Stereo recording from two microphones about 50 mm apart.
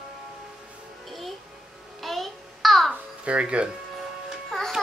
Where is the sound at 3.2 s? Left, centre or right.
Right.